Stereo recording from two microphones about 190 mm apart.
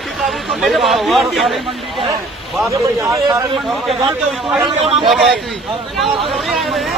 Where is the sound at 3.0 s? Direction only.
15° right (ahead or behind).